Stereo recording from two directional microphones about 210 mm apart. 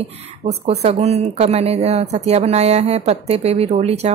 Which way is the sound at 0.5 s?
30° right (ahead or behind).